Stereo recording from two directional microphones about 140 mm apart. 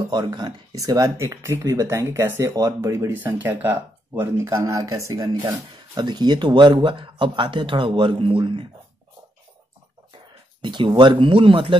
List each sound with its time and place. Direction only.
0.1 s speech: 30° right (ahead or behind)
10.6 s speech: 35° right (ahead or behind)